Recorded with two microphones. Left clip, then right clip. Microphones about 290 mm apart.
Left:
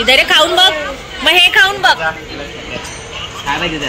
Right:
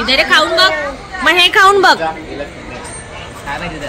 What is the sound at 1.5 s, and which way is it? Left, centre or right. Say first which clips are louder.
Speech: right 2 dB; right.